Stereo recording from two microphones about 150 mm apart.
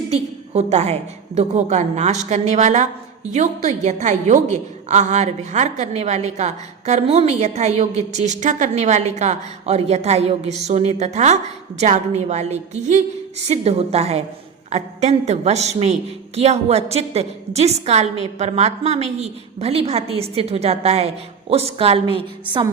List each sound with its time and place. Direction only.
0.1 s a woman's voice: 45° right (ahead or behind)